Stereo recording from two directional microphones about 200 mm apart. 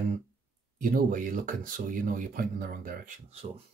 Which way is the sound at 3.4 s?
30° right (ahead or behind).